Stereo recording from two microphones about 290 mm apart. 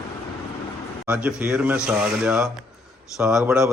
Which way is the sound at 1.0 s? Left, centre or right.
Centre.